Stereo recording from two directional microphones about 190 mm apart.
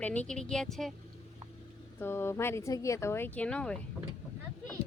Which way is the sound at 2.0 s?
10° left (ahead or behind).